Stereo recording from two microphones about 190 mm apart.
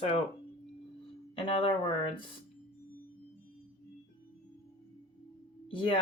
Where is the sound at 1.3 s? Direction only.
25° left (ahead or behind).